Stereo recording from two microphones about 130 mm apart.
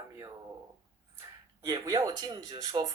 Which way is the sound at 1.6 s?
25° right (ahead or behind).